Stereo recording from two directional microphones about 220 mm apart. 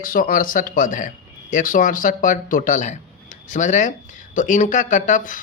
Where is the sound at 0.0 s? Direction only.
40° left (ahead or behind).